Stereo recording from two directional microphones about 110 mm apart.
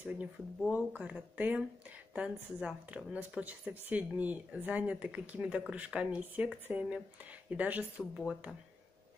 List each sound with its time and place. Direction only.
0.0 s speech: 15° right (ahead or behind)